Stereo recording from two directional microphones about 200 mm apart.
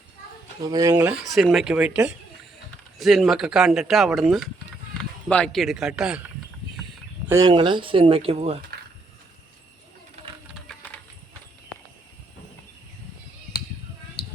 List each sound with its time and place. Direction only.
0.6 s speech: 15° right (ahead or behind)
7.3 s speech: 15° right (ahead or behind)
10.7 s a sound: 5° left (ahead or behind)